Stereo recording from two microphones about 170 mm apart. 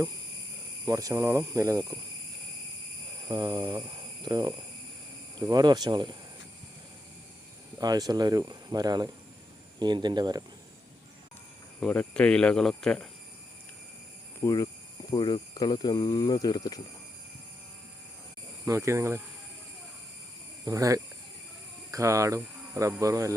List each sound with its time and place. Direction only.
0.9 s speech: 20° right (ahead or behind)
3.2 s speech: 25° right (ahead or behind)
7.8 s speech: 20° right (ahead or behind)
11.8 s speech: 5° left (ahead or behind)
14.4 s speech: 20° left (ahead or behind)
18.6 s speech: 15° right (ahead or behind)
20.7 s speech: 20° right (ahead or behind)